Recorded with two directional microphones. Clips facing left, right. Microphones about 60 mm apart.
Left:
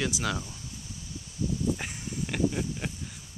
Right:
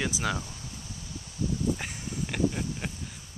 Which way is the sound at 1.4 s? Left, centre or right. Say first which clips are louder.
Even; right.